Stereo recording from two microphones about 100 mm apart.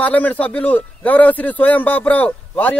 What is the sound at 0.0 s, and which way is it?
A man's voice, 15° left (ahead or behind).